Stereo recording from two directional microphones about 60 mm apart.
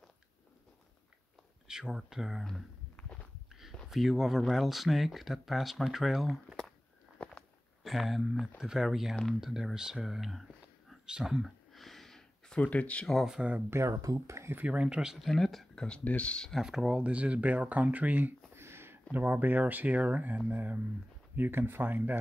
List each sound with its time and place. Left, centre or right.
1.7 s speech: centre
3.0 s walk: left
3.9 s speech: centre
7.2 s walk: centre
7.8 s speech: centre
11.7 s a sound: centre
12.5 s speech: left
13.7 s speech: right
14.7 s speech: centre
15.1 s speech: centre
16.0 s speech: left
16.5 s speech: centre; by 18.3 s right
18.5 s a sound: right
19.1 s speech: right